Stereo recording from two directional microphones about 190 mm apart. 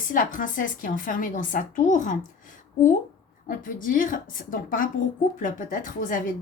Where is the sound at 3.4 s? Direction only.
45° left (ahead or behind).